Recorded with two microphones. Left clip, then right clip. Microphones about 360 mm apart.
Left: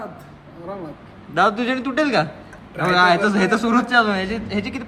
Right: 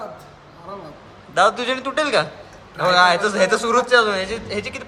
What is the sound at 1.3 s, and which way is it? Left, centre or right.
A man's voice, centre.